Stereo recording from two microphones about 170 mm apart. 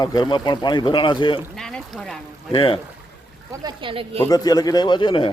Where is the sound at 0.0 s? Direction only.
25° left (ahead or behind).